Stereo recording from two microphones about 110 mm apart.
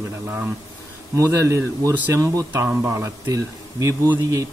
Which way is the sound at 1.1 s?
25° right (ahead or behind).